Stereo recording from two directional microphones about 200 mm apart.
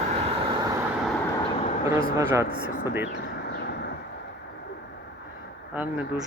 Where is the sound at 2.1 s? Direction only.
15° right (ahead or behind).